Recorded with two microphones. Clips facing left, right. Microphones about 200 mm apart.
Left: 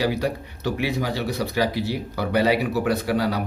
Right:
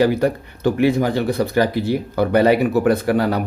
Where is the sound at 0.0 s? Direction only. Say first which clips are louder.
Right 7 dB; 50° right (ahead or behind).